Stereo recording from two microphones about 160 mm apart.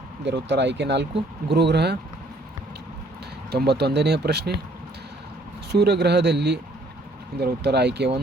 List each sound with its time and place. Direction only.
0.3 s speech: 90° right
3.5 s speech: 90° right
5.7 s speech: 90° right